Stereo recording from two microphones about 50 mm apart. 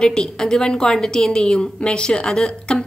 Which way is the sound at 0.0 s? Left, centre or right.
Centre.